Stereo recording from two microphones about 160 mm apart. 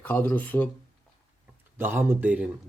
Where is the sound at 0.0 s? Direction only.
10° left (ahead or behind).